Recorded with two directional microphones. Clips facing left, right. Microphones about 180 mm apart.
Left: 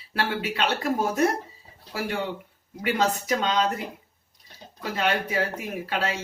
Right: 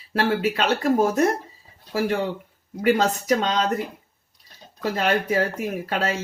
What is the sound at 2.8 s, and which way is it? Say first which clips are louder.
Speech: right 5 dB; 45° right (ahead or behind).